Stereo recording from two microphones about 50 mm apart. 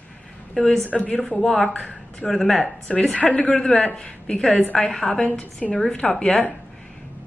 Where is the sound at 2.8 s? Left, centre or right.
Left.